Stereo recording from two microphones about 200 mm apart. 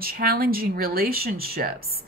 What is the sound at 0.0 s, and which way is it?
Speech, 45° right (ahead or behind).